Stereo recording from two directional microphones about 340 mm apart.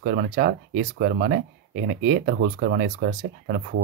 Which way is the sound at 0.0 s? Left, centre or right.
Right.